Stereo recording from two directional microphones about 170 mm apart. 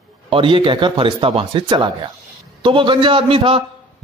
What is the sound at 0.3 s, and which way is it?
A man's voice, 30° right (ahead or behind).